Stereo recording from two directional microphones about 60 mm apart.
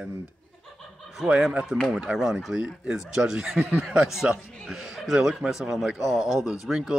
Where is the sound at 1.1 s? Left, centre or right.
Centre.